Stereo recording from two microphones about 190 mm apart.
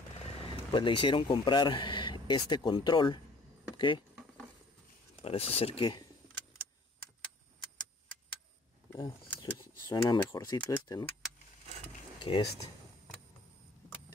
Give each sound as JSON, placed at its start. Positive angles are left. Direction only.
{"t": 0.7, "sound": "speech", "side_deg": 25}
{"t": 5.2, "sound": "speech", "side_deg": 30}
{"t": 9.6, "sound": "speech", "side_deg": 25}
{"t": 12.2, "sound": "speech", "side_deg": 25}